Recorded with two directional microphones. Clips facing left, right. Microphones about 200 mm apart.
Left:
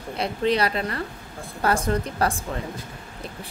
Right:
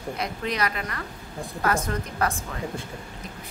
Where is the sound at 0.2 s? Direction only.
30° left (ahead or behind).